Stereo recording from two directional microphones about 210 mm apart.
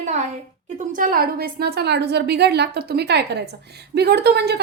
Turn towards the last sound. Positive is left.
turn(degrees=-50)  # may be behind; listen again after turning